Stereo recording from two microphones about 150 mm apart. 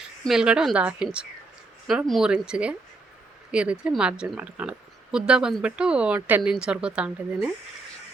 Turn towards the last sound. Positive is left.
turn(degrees=-10)  # may be behind; listen again after turning